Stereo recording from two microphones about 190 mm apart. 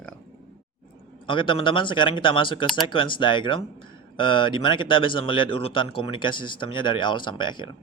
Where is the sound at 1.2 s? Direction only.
25° left (ahead or behind).